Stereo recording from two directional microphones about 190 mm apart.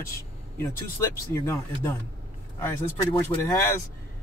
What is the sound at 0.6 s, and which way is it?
Speech, 15° left (ahead or behind).